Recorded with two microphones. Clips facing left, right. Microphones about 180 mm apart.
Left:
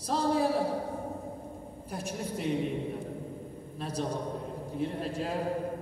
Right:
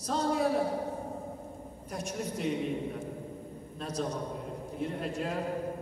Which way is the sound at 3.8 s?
30° left (ahead or behind).